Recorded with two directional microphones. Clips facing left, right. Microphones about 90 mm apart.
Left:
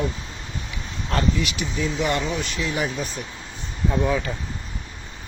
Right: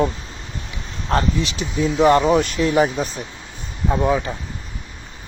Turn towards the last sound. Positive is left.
turn(degrees=-20)  # may be behind; listen again after turning